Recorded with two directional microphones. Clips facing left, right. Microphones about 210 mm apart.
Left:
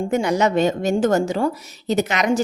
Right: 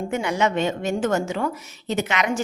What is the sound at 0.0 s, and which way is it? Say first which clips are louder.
A woman's voice: left 4 dB; 40° left (ahead or behind).